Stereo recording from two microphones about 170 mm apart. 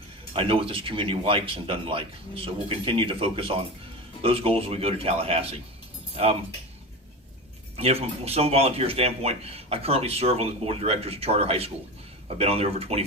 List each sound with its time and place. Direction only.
0.3 s a man's voice: 30° right (ahead or behind)
7.8 s a man's voice: 35° right (ahead or behind)